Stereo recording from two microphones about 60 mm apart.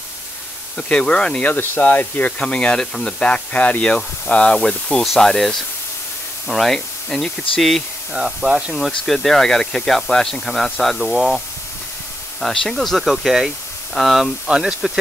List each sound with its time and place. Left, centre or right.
0.8 s speech: centre
1.4 s speech: left
2.3 s speech: centre
8.1 s speech: centre
8.7 s speech: centre